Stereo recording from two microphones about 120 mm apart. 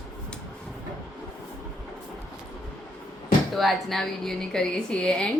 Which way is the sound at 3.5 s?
Centre (ahead or behind).